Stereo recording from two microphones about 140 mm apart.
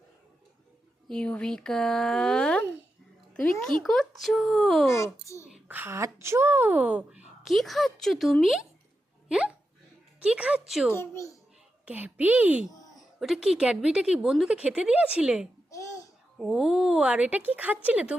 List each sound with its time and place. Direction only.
1.0 s speech: 5° left (ahead or behind)
4.9 s a child's voice: 20° left (ahead or behind)
5.5 s a woman's voice: 15° right (ahead or behind)
7.4 s speech: centre (ahead or behind)
10.2 s a woman's voice: 10° right (ahead or behind)
10.9 s a child's voice: 15° left (ahead or behind)
11.9 s a woman's voice: 10° right (ahead or behind)